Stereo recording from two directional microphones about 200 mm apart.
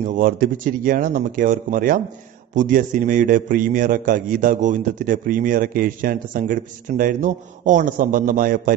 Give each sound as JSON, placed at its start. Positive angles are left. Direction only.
{"t": 0.0, "sound": "a man's voice", "side_deg": -45}